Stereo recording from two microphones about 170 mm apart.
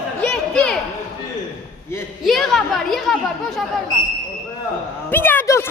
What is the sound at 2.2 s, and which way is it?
Speech, centre (ahead or behind).